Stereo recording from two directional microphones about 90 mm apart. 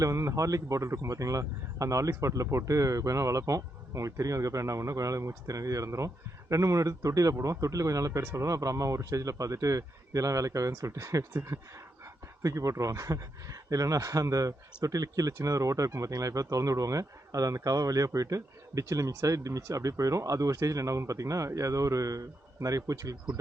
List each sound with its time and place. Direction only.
0.0 s speech: 35° right (ahead or behind)